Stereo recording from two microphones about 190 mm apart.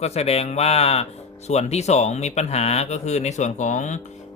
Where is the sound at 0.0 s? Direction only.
35° left (ahead or behind).